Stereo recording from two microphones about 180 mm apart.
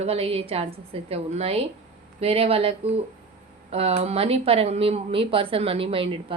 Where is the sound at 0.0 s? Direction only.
30° right (ahead or behind).